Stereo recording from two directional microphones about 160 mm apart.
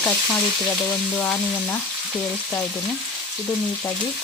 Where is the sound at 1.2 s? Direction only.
10° left (ahead or behind).